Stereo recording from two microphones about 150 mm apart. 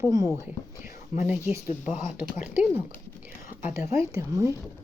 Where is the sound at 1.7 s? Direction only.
55° left (ahead or behind).